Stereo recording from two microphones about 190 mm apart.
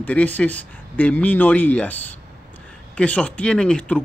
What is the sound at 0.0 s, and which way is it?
Speech, 10° left (ahead or behind).